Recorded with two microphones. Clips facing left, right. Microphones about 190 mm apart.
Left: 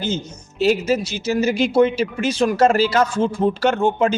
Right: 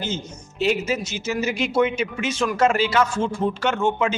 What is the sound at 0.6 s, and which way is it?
Speech, 35° left (ahead or behind).